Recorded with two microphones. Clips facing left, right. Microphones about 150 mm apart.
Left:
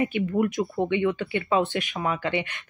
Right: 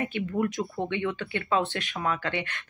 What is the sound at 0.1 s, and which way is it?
Speech, 15° left (ahead or behind).